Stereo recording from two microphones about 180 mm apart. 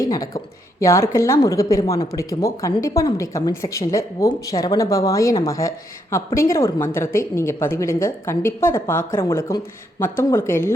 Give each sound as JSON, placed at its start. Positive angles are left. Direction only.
{"t": 0.0, "sound": "a woman's voice", "side_deg": 20}